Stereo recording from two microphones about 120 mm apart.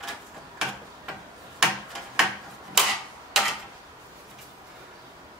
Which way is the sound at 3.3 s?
Centre (ahead or behind).